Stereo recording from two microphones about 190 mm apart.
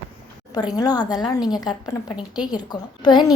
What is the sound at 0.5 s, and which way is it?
A woman's voice, 20° left (ahead or behind).